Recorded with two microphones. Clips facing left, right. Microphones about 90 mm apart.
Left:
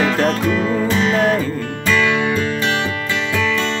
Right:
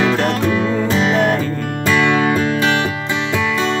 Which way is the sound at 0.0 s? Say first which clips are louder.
Right 1 dB; 10° right (ahead or behind).